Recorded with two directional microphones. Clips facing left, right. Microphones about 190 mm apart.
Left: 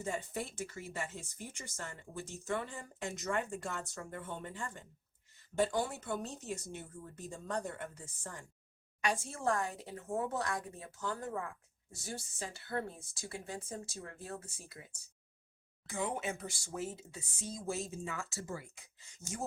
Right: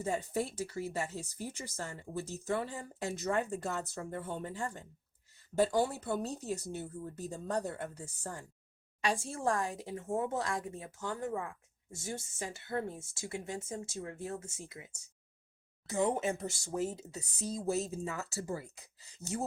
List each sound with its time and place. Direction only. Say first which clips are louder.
0.0 s speech: right 5 dB; 35° right (ahead or behind)
9.0 s speech: right 2 dB; 25° right (ahead or behind)
12.0 s speech: right 3 dB; 20° right (ahead or behind)
15.9 s speech: right 6 dB; 40° right (ahead or behind)